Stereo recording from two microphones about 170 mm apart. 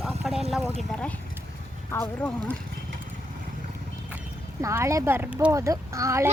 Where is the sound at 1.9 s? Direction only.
10° left (ahead or behind).